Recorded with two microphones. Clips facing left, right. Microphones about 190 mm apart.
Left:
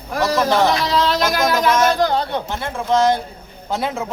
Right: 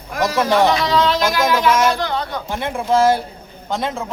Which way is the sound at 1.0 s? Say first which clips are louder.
Right 1 dB; 40° left (ahead or behind).